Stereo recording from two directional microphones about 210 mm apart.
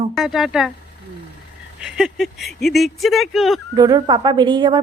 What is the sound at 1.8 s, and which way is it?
Speech, 5° right (ahead or behind).